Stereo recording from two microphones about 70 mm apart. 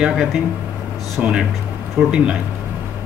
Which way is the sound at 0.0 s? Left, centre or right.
Centre.